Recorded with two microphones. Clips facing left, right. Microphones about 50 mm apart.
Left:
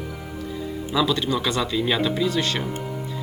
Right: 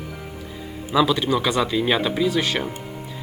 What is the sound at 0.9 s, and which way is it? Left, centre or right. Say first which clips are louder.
Speech: right 4 dB; centre.